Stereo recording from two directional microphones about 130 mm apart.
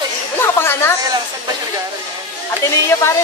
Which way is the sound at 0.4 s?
20° left (ahead or behind).